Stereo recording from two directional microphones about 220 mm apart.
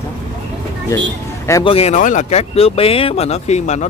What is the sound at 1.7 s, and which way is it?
Speech, 30° left (ahead or behind).